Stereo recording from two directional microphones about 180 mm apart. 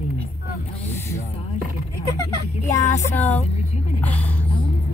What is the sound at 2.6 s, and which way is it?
Music, 40° left (ahead or behind).